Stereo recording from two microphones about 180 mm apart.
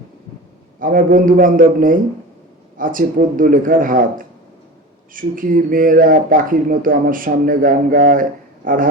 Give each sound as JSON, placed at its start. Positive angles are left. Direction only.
{"t": 0.8, "sound": "speech", "side_deg": -50}